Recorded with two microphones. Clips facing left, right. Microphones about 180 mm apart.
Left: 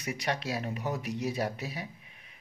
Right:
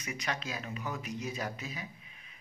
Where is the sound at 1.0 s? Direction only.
70° left (ahead or behind).